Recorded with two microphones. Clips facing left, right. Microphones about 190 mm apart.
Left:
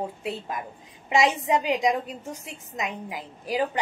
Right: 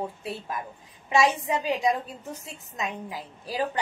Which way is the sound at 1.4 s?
20° left (ahead or behind).